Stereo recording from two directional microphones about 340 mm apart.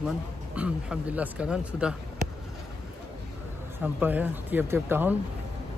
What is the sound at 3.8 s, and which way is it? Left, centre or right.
Speech, centre.